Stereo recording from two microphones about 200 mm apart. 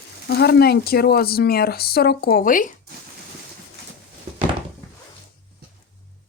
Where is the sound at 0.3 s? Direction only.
55° left (ahead or behind).